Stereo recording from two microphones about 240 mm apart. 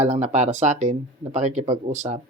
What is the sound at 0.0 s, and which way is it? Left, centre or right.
Speech, right.